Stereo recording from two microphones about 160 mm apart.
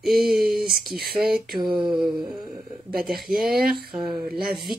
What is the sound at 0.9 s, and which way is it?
Mantra, 75° right (ahead or behind).